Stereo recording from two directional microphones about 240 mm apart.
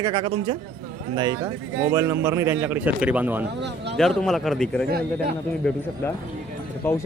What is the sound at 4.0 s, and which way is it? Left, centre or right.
A man's voice, centre.